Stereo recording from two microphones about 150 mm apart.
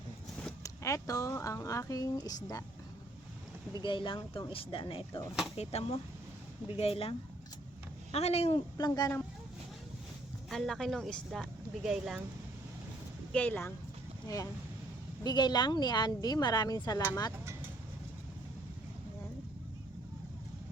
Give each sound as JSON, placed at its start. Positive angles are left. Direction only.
{"t": 0.6, "sound": "speech", "side_deg": 20}
{"t": 3.8, "sound": "speech", "side_deg": 35}
{"t": 8.8, "sound": "speech", "side_deg": 25}
{"t": 10.5, "sound": "speech", "side_deg": 0}
{"t": 13.3, "sound": "speech", "side_deg": 10}
{"t": 15.2, "sound": "speech", "side_deg": 30}